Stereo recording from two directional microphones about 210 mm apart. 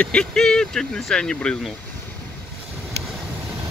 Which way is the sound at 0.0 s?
5° left (ahead or behind).